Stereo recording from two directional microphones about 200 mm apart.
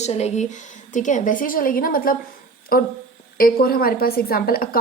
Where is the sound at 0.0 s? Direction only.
35° left (ahead or behind).